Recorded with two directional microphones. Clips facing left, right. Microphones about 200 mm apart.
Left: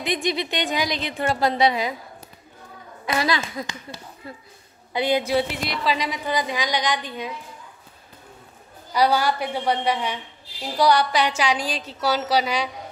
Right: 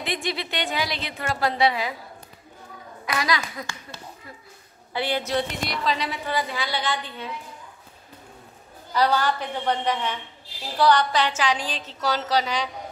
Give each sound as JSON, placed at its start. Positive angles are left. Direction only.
{"t": 0.0, "sound": "a woman's voice", "side_deg": 20}
{"t": 3.1, "sound": "a woman's voice", "side_deg": 25}
{"t": 8.9, "sound": "a woman's voice", "side_deg": 10}